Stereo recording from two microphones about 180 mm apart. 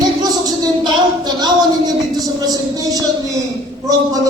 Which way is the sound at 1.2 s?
20° right (ahead or behind).